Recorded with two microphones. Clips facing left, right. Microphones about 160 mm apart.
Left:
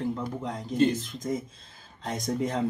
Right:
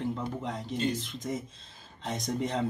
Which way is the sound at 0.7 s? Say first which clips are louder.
Left 8 dB; 50° left (ahead or behind).